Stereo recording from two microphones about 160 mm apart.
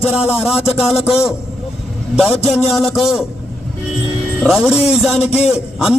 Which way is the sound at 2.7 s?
Centre (ahead or behind).